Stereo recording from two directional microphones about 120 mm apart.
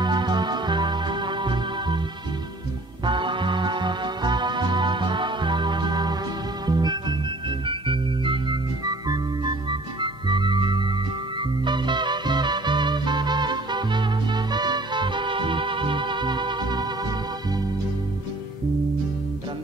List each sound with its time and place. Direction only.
0.0 s music: 40° right (ahead or behind)
3.1 s music: 40° right (ahead or behind)
6.6 s organ: 35° right (ahead or behind)
11.6 s music: 40° right (ahead or behind)